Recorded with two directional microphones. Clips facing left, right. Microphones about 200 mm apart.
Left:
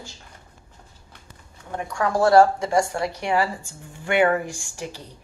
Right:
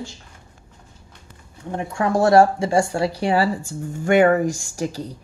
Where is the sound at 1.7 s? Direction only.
25° right (ahead or behind); by 5.0 s 40° right (ahead or behind).